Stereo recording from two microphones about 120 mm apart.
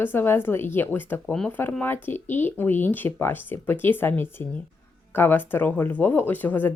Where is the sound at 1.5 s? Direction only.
15° left (ahead or behind).